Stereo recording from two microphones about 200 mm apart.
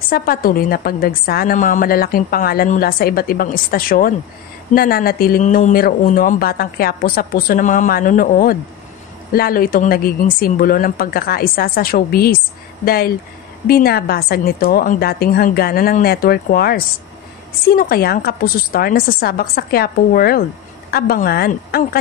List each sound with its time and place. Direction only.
0.1 s a woman's voice: 45° left (ahead or behind)